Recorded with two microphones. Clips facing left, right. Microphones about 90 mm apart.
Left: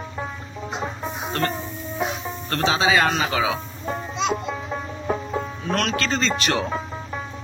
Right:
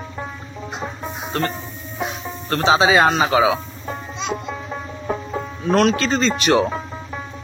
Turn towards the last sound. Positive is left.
turn(degrees=-15)  # may be behind; listen again after turning